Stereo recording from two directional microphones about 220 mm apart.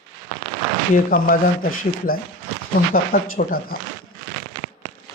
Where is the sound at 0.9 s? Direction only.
40° left (ahead or behind).